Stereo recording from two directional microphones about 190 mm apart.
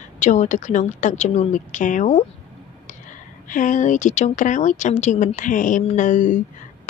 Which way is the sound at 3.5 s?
45° left (ahead or behind).